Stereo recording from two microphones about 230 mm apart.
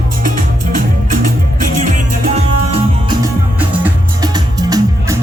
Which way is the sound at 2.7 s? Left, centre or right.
Centre.